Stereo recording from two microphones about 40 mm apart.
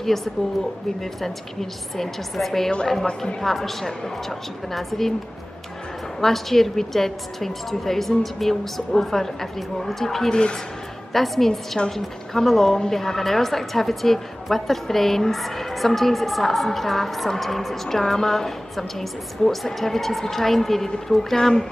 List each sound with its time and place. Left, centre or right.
0.0 s a woman's voice: centre
6.2 s a woman's voice: centre
10.3 s speech: centre
11.1 s a woman's voice: centre